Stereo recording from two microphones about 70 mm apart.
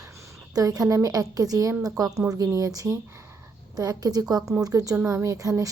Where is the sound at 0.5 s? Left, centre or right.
Right.